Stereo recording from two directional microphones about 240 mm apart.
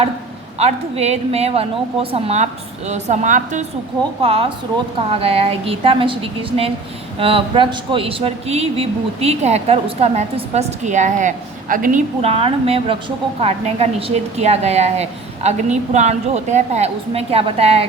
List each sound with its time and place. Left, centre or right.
0.6 s speech: right